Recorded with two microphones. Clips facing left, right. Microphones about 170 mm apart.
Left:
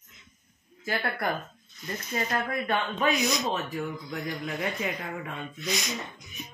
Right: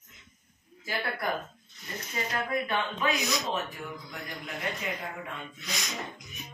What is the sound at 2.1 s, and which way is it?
Speech, 55° left (ahead or behind).